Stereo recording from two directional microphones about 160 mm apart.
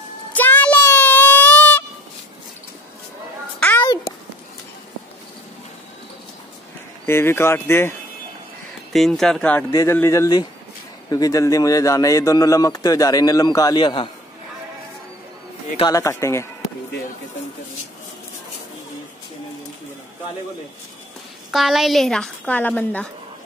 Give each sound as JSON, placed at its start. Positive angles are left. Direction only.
{"t": 0.3, "sound": "a sound", "side_deg": 10}
{"t": 3.5, "sound": "a sound", "side_deg": 10}
{"t": 7.1, "sound": "speech", "side_deg": 15}
{"t": 8.9, "sound": "a woman's voice", "side_deg": 0}
{"t": 9.7, "sound": "a man's voice", "side_deg": 20}
{"t": 15.9, "sound": "speech", "side_deg": 20}
{"t": 21.5, "sound": "a woman's voice", "side_deg": 0}